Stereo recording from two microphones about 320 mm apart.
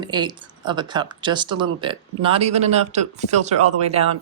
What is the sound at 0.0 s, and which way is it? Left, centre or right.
Speech, centre.